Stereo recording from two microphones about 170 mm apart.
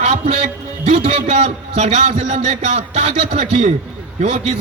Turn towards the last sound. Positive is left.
turn(degrees=-40)  # may be behind; listen again after turning